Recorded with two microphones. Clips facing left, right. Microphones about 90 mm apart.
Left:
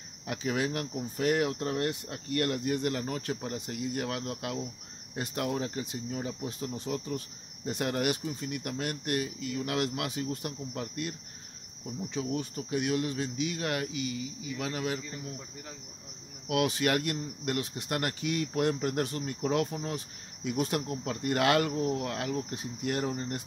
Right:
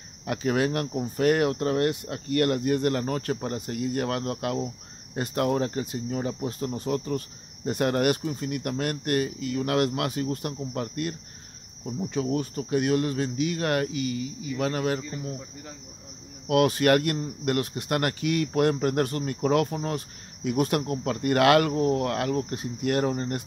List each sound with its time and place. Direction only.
0.3 s speech: 55° right (ahead or behind)
16.4 s speech: 50° right (ahead or behind)